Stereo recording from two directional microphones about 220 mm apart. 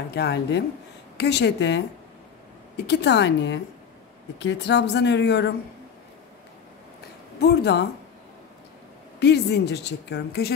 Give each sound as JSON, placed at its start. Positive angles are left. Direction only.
{"t": 0.1, "sound": "a woman's voice", "side_deg": 50}
{"t": 2.9, "sound": "a woman's voice", "side_deg": 50}
{"t": 7.3, "sound": "a woman's voice", "side_deg": 45}
{"t": 9.2, "sound": "a woman's voice", "side_deg": 50}